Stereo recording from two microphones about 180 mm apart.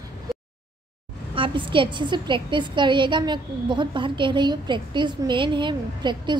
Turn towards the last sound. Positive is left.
turn(degrees=-25)  # may be behind; listen again after turning